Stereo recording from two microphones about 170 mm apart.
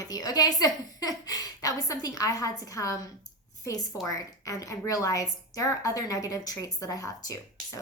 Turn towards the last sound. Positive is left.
turn(degrees=20)  # may be behind; listen again after turning